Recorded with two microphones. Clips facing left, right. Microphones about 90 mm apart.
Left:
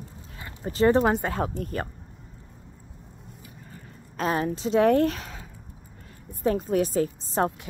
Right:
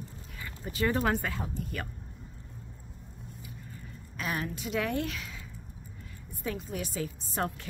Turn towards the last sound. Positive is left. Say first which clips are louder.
# left 8 dB
turn(degrees=30)  # may be behind; listen again after turning